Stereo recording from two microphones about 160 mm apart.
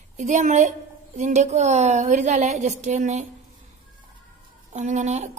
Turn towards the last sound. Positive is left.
turn(degrees=-50)  # may be behind; listen again after turning